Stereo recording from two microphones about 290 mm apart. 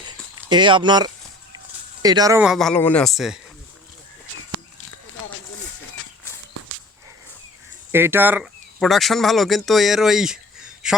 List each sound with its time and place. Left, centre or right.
0.0 s a sound: centre
2.0 s speech: centre
7.9 s speech: centre